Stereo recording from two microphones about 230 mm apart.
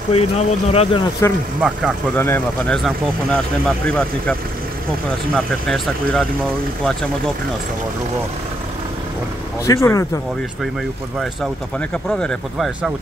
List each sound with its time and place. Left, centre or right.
0.1 s speech: left
1.2 s speech: centre
1.6 s speech: centre
2.1 s speech: centre
9.7 s speech: centre
11.9 s speech: centre